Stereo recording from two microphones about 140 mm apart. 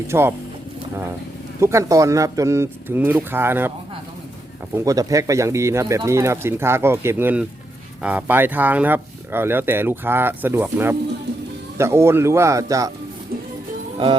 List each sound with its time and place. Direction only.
0.1 s speech: 15° right (ahead or behind)
1.6 s speech: 20° right (ahead or behind)
4.9 s speech: 25° right (ahead or behind)